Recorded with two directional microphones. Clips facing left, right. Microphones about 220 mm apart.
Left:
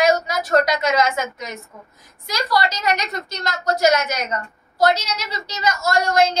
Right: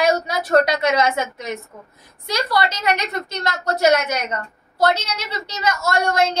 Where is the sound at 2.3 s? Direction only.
25° right (ahead or behind).